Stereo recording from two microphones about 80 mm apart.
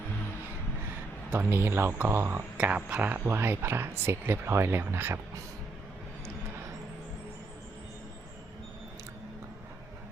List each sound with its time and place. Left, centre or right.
1.3 s speech: right
2.6 s speech: centre
3.2 s speech: right